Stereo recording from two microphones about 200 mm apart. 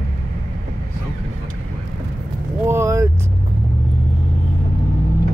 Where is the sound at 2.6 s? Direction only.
15° right (ahead or behind).